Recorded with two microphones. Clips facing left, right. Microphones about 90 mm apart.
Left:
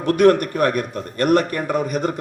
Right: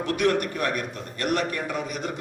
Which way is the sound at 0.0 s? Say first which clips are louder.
Left 9 dB; 50° left (ahead or behind).